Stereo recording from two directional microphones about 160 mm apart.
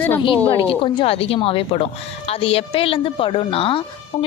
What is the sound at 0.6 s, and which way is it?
A woman's voice, 35° left (ahead or behind).